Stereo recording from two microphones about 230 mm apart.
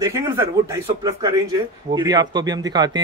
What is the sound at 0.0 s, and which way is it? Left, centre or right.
Speech, centre.